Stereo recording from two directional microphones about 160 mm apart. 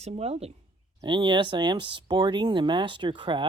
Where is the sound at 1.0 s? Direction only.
30° right (ahead or behind).